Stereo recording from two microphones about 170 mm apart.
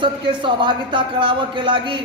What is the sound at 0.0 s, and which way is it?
A man's voice, 30° right (ahead or behind).